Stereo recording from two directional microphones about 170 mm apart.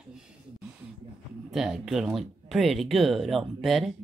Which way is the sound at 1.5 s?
5° right (ahead or behind).